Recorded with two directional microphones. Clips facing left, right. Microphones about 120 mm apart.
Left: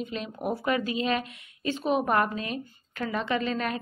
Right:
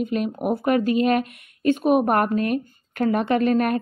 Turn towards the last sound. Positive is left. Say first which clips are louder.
# right 9 dB
turn(degrees=-50)  # may be behind; listen again after turning